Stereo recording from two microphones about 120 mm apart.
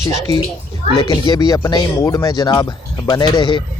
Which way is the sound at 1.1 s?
30° left (ahead or behind).